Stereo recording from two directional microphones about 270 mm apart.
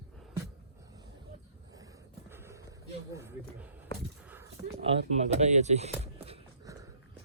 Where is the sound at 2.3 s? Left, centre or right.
Centre.